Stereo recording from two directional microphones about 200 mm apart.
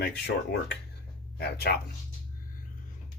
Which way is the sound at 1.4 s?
50° left (ahead or behind).